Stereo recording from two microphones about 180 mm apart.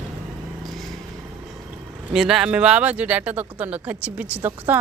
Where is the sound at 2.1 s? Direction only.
5° right (ahead or behind).